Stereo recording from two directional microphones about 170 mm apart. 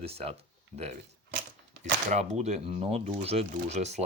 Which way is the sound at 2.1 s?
40° right (ahead or behind).